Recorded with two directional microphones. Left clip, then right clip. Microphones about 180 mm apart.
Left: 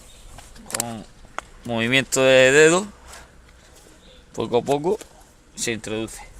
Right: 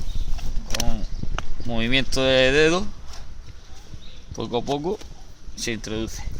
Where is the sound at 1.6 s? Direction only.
50° left (ahead or behind).